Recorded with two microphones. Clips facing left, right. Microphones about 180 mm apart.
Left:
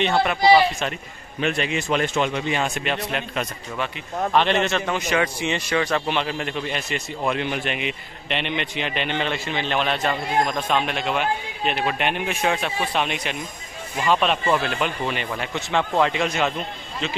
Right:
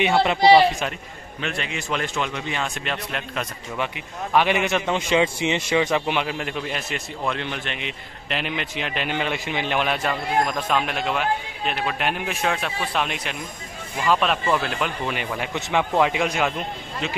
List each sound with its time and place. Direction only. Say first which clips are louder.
0.2 s speech: right 2 dB; 25° right (ahead or behind)
1.4 s speech: left 6 dB; 20° left (ahead or behind)
2.8 s a man's voice: left 3 dB; 5° left (ahead or behind)
3.7 s a man's voice: left 1 dB; 15° right (ahead or behind)
7.2 s a man's voice: left 4 dB; 10° left (ahead or behind); by 16.5 s 10° right (ahead or behind)